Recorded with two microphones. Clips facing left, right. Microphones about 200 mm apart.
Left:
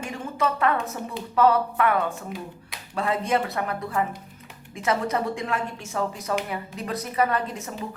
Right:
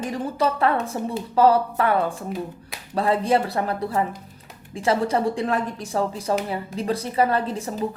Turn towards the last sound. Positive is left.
turn(degrees=-35)  # may be behind; listen again after turning